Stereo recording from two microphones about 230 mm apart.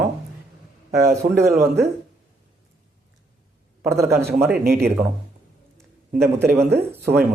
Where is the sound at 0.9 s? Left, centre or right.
Centre.